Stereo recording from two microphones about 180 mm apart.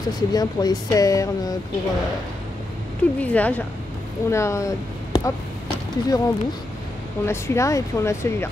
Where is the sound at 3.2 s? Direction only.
10° left (ahead or behind).